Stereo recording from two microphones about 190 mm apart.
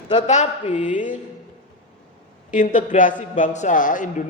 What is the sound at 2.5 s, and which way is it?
A man's voice, 45° left (ahead or behind).